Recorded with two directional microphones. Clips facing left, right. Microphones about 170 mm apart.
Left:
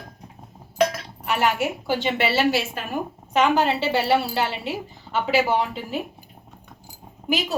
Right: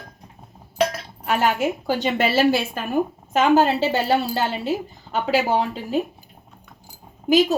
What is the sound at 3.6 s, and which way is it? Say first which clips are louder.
Speech: right 2 dB; 45° right (ahead or behind).